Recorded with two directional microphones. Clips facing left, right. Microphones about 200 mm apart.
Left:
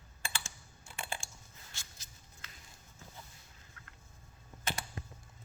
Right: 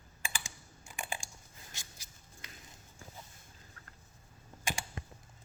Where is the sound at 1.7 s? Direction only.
15° right (ahead or behind).